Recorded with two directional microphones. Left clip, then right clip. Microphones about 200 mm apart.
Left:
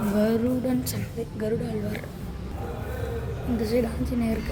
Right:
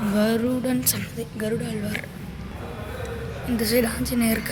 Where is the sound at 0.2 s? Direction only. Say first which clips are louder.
Right 2 dB; 10° left (ahead or behind).